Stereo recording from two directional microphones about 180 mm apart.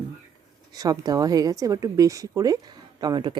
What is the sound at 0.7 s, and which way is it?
Speech, 20° right (ahead or behind).